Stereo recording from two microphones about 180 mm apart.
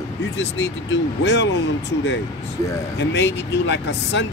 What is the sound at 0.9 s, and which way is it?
Speech, 75° left (ahead or behind).